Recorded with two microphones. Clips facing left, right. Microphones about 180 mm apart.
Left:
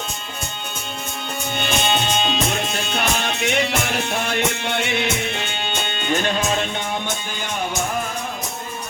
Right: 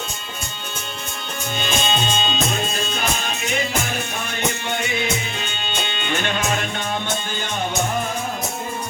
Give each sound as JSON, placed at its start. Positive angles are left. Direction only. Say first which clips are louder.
{"t": 1.5, "sound": "music", "louder": "left 1 dB", "side_deg": 65}